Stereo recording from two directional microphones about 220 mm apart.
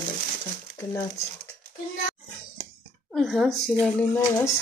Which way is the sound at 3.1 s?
Centre (ahead or behind).